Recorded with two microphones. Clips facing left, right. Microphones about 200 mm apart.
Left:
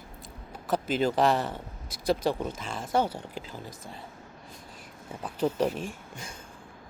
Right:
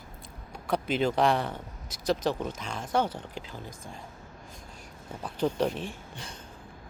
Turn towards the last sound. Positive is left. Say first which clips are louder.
# left 1 dB
turn(degrees=-35)  # may be behind; listen again after turning